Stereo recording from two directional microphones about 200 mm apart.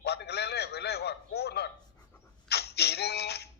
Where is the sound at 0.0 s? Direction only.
55° left (ahead or behind).